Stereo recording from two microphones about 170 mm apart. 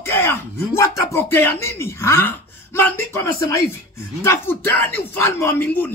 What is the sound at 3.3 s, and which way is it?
Speech, 15° left (ahead or behind).